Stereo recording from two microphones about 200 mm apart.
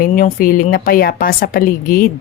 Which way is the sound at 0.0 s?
45° left (ahead or behind).